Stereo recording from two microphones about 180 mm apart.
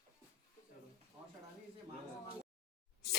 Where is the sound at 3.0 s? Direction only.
65° left (ahead or behind).